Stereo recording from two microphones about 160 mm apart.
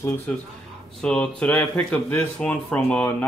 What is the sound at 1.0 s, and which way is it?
Speech, 5° left (ahead or behind).